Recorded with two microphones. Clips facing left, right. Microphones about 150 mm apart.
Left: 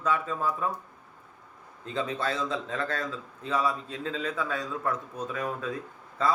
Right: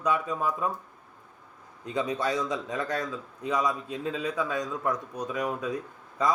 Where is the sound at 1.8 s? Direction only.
15° right (ahead or behind).